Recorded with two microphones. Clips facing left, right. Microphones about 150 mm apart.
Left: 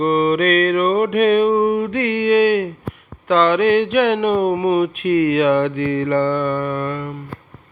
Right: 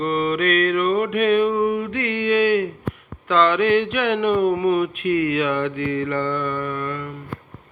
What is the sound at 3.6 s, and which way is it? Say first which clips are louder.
Mantra: left 4 dB; 20° left (ahead or behind).